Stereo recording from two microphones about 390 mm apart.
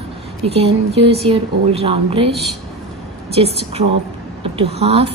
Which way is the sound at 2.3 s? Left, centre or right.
Centre.